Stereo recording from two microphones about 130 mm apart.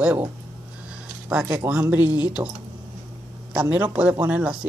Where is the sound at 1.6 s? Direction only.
15° right (ahead or behind).